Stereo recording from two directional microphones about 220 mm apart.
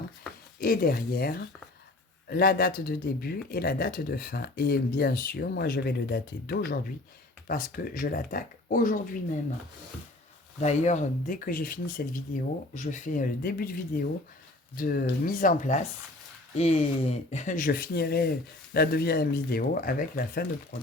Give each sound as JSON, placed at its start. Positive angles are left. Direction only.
{"t": 0.6, "sound": "speech", "side_deg": 40}
{"t": 10.6, "sound": "speech", "side_deg": 30}